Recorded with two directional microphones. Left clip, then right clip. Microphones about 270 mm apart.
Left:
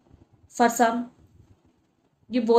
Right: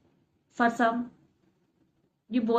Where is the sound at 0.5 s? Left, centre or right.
Left.